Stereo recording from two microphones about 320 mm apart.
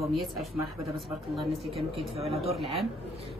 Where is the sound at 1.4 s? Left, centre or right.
Centre.